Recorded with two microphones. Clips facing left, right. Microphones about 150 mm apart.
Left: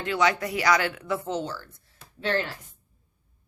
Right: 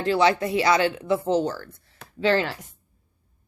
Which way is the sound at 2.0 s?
90° right.